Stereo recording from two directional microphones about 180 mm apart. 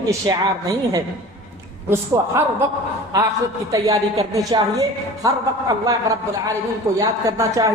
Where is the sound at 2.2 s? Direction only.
15° right (ahead or behind).